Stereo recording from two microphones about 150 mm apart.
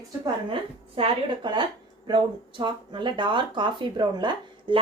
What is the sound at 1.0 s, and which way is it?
Speech, 35° right (ahead or behind).